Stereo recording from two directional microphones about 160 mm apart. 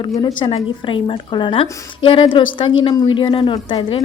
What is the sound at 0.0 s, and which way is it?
A woman's voice, 25° left (ahead or behind).